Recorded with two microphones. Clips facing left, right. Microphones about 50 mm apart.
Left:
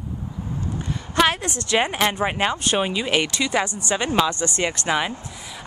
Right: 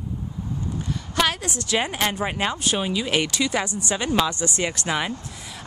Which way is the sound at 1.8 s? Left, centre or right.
Left.